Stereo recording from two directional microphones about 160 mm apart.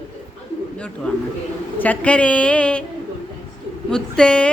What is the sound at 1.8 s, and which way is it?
A woman's voice, 10° left (ahead or behind).